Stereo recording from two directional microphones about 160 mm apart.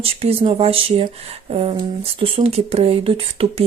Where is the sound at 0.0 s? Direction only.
35° right (ahead or behind).